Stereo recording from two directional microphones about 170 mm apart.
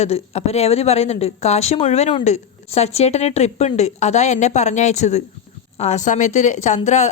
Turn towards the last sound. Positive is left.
turn(degrees=45)  # may be behind; listen again after turning